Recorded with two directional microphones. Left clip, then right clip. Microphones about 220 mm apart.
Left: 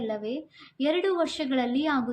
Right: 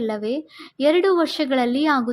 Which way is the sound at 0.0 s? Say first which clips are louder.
Right 7 dB; 40° right (ahead or behind).